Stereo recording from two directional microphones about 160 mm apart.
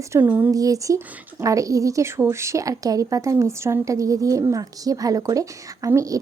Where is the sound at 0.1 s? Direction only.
10° right (ahead or behind).